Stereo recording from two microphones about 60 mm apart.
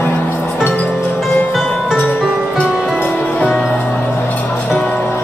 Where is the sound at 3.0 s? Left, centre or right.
Left.